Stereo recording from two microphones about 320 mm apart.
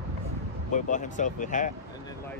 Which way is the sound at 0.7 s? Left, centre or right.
Left.